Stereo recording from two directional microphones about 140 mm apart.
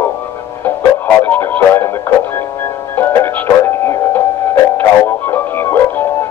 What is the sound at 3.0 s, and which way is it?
Music, 15° left (ahead or behind).